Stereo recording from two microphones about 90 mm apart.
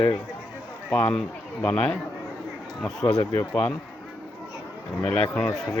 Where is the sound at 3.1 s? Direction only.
40° left (ahead or behind).